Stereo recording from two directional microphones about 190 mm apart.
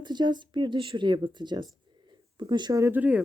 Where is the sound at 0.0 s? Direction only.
25° right (ahead or behind).